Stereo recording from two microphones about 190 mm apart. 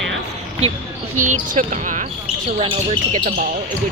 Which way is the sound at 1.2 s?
40° right (ahead or behind).